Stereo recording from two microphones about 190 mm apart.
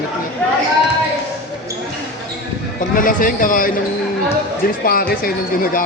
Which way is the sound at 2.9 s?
45° left (ahead or behind).